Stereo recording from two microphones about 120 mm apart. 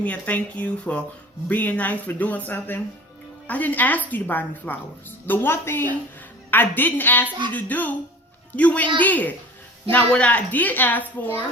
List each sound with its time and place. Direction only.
0.0 s a child's voice: 10° left (ahead or behind)